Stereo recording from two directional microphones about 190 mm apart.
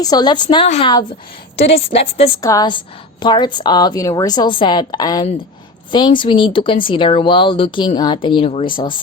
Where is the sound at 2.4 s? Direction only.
20° left (ahead or behind).